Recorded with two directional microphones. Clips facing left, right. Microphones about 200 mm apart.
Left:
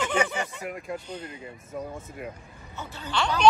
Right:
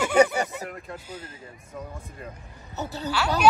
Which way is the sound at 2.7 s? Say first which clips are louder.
Right 7 dB; 40° right (ahead or behind).